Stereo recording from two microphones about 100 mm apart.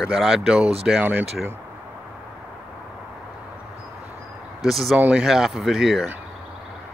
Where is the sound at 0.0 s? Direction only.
5° right (ahead or behind).